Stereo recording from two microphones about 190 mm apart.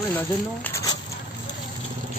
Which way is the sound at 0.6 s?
15° left (ahead or behind).